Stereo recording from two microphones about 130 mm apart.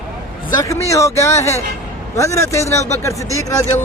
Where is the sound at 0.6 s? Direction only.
25° left (ahead or behind).